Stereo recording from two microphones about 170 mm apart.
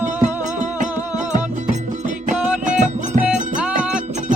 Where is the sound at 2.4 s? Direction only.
5° right (ahead or behind).